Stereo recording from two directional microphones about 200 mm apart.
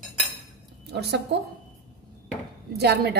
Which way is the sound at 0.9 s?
55° right (ahead or behind).